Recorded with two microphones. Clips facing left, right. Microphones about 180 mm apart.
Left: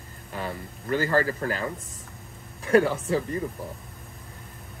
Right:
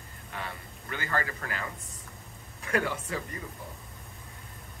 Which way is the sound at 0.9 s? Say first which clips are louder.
Left 9 dB; 35° left (ahead or behind).